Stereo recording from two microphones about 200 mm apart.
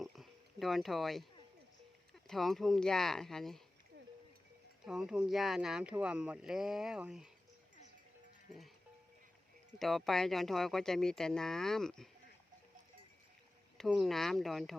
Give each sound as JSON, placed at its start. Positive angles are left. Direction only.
{"t": 0.0, "sound": "a sound", "side_deg": 0}
{"t": 2.2, "sound": "speech", "side_deg": 0}
{"t": 4.9, "sound": "speech", "side_deg": -5}
{"t": 9.7, "sound": "speech", "side_deg": 0}
{"t": 13.7, "sound": "speech", "side_deg": 0}